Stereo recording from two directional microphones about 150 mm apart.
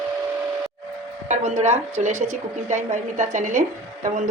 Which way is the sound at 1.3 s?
50° right (ahead or behind).